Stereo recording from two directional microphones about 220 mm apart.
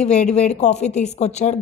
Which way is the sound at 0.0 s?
30° left (ahead or behind).